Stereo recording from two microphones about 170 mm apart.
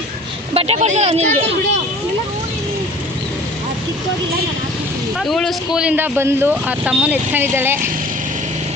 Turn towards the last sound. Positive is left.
turn(degrees=-15)  # may be behind; listen again after turning